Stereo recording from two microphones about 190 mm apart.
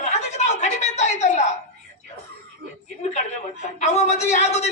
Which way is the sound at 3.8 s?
35° left (ahead or behind).